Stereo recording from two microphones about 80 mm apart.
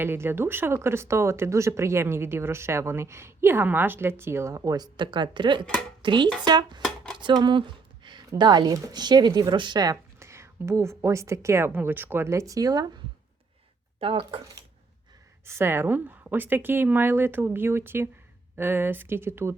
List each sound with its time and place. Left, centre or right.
0.0 s speech: right
4.9 s speech: right
6.4 s speech: right
7.2 s a sound: right
8.4 s speech: right
9.8 s speech: right
15.4 s a woman's voice: right